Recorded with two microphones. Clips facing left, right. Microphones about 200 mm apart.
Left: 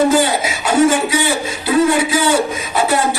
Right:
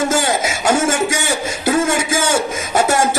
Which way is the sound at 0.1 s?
45° right (ahead or behind).